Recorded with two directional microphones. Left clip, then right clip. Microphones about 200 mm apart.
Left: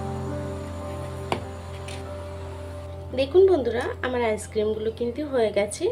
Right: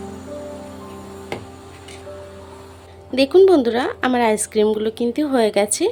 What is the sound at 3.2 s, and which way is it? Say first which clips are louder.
A woman's voice: right 6 dB; 60° right (ahead or behind).